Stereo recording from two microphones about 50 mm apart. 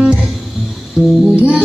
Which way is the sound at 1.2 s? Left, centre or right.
Right.